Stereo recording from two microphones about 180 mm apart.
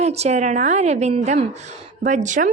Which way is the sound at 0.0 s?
35° right (ahead or behind).